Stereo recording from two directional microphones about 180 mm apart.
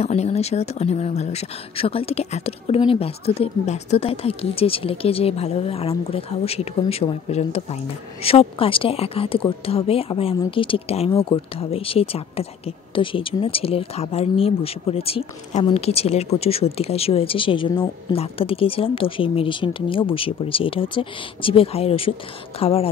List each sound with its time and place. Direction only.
0.0 s speech: 35° left (ahead or behind)